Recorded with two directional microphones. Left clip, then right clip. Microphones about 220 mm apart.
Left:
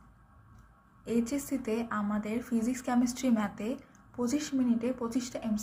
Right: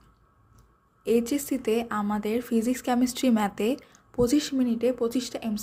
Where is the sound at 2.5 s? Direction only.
70° right (ahead or behind).